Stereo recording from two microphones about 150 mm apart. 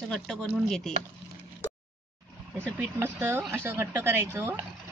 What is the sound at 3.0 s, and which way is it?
A woman's voice, 15° right (ahead or behind).